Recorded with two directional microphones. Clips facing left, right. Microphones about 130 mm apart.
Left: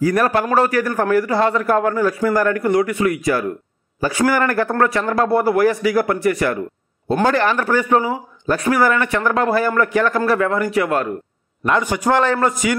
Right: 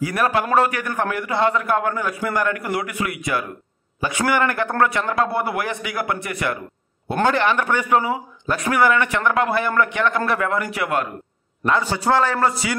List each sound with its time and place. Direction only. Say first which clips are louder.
0.0 s a man's voice: left 4 dB; 40° left (ahead or behind)
11.7 s a man's voice: left 2 dB; 15° left (ahead or behind)